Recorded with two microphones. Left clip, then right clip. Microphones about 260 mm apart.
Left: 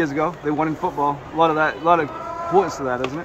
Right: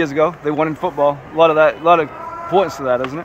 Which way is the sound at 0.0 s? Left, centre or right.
Right.